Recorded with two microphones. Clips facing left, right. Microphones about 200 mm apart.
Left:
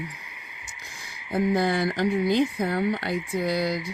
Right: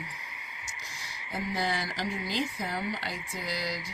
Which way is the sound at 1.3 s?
55° left (ahead or behind).